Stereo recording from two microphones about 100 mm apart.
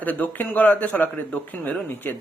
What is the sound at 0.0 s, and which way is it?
Speech, 15° left (ahead or behind).